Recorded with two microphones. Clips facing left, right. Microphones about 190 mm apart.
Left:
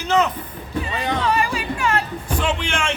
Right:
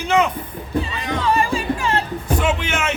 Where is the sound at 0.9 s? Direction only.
30° left (ahead or behind).